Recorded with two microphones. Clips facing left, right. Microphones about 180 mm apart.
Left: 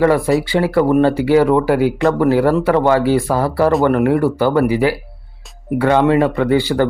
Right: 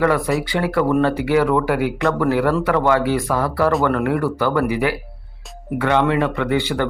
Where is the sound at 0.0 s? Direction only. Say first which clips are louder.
Left 5 dB; 30° left (ahead or behind).